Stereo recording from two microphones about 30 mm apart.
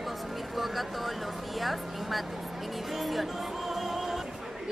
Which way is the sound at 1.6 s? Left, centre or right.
Centre.